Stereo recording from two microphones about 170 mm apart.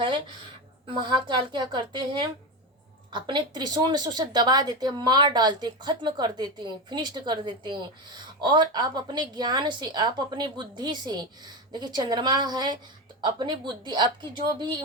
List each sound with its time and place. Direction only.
0.9 s a woman's voice: 25° right (ahead or behind)